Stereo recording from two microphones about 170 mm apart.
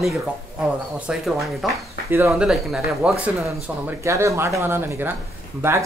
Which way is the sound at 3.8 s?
15° right (ahead or behind).